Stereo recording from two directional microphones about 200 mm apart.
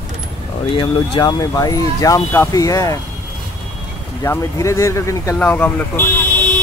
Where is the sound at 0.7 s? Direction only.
25° left (ahead or behind).